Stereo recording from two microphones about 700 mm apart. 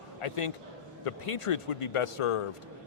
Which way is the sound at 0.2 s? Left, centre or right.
Left.